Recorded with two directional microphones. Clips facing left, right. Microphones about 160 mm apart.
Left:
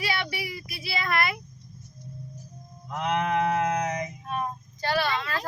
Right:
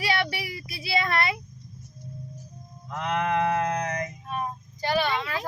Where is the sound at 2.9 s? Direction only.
20° left (ahead or behind).